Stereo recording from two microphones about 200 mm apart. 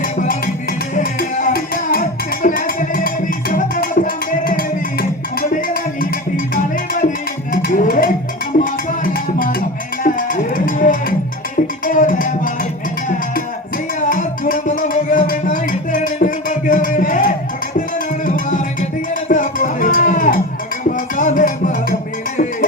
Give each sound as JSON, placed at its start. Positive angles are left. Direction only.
{"t": 0.0, "sound": "music", "side_deg": 40}
{"t": 7.5, "sound": "a sound", "side_deg": 45}
{"t": 8.5, "sound": "music", "side_deg": 40}
{"t": 14.0, "sound": "music", "side_deg": 40}